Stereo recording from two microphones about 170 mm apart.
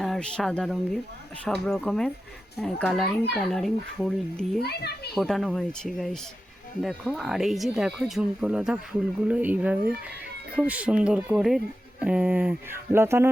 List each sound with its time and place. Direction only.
0.0 s speech: 5° left (ahead or behind)
4.6 s a child's voice: 70° left (ahead or behind)
5.1 s speech: centre (ahead or behind); by 13.3 s 15° right (ahead or behind)